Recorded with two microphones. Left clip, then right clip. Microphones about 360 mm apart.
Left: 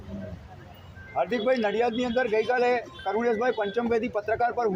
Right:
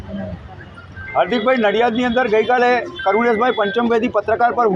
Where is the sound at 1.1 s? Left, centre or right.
Left.